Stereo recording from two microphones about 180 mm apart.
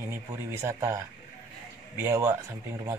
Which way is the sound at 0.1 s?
15° right (ahead or behind).